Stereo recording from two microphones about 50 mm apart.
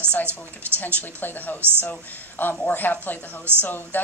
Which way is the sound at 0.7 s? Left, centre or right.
Left.